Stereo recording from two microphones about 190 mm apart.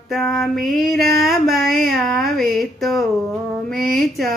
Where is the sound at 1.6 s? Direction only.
50° right (ahead or behind).